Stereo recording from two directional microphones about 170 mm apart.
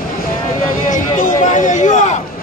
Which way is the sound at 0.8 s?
50° left (ahead or behind).